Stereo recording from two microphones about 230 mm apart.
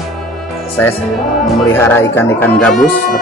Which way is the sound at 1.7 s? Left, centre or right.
Centre.